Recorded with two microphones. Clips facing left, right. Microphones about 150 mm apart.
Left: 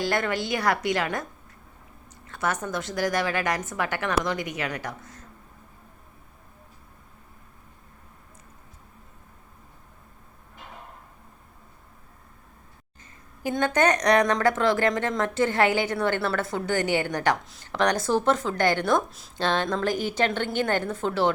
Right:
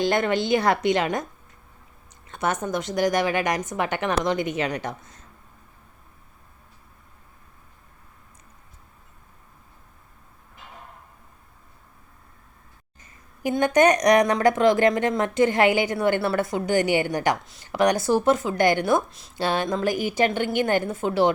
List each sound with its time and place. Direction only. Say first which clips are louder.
0.0 s a woman's voice: right 4 dB; 20° right (ahead or behind)
2.2 s a woman's voice: right 3 dB; 20° right (ahead or behind)
13.4 s a woman's voice: right 4 dB; 15° right (ahead or behind)